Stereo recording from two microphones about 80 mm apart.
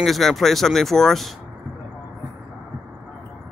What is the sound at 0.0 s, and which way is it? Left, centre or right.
Speech, centre.